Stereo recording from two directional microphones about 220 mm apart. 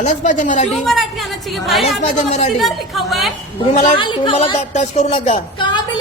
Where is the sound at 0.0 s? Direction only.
35° left (ahead or behind).